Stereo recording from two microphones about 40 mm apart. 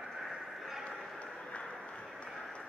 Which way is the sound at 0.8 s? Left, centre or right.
Left.